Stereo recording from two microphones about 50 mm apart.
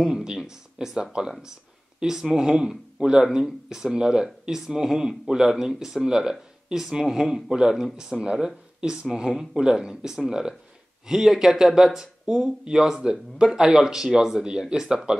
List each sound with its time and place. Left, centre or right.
0.1 s speech: centre